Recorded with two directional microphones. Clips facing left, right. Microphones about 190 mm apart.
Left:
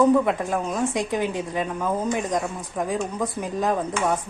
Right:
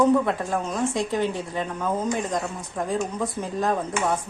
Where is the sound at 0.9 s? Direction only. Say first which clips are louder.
Even; 15° left (ahead or behind).